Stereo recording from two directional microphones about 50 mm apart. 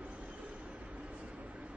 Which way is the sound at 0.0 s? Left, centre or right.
Right.